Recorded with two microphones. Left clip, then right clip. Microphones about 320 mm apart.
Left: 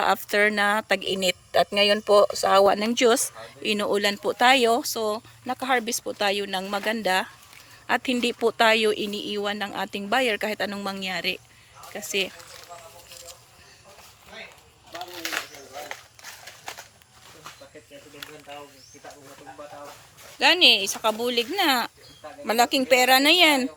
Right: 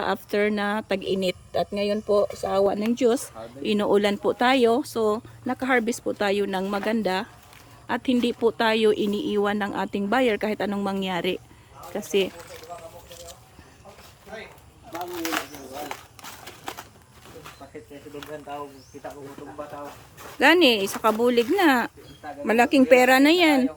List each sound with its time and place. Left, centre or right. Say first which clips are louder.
0.0 s a woman's voice: left 3 dB; centre
2.0 s speech: left 3 dB; centre
2.3 s a woman's voice: left 4 dB; centre
14.9 s crumpling: right 3 dB; right
20.4 s speech: even; centre